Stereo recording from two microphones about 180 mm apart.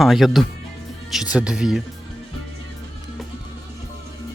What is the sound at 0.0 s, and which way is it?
Speech, centre (ahead or behind).